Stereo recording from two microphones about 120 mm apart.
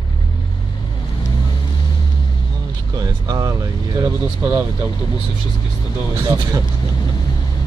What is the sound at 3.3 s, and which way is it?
Speech, 30° right (ahead or behind).